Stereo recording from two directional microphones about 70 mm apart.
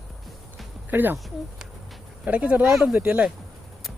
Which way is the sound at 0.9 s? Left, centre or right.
Right.